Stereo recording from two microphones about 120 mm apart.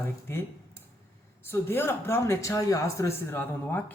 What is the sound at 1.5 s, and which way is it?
Speech, 20° left (ahead or behind).